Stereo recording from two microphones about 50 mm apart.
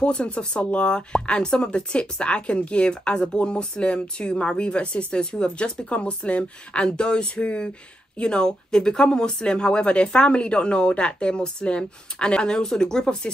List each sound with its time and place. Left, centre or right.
0.0 s speech: left